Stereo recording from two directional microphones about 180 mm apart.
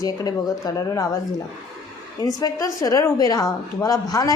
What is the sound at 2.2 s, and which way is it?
A woman's voice, 20° left (ahead or behind).